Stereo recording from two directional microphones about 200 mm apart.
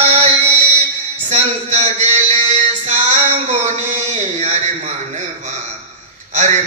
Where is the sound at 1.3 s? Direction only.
35° right (ahead or behind).